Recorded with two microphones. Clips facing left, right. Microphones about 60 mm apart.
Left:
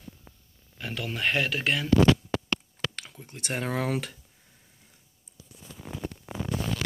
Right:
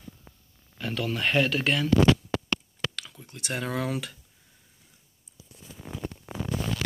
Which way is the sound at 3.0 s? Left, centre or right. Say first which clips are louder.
Right 1 dB; left.